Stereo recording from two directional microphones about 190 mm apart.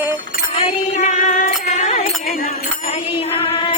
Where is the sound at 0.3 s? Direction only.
35° left (ahead or behind).